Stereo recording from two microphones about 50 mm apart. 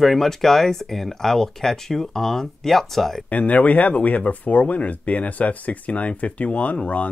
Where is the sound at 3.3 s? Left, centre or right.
Left.